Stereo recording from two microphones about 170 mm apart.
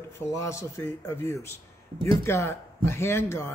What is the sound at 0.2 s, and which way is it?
Speech, 15° left (ahead or behind).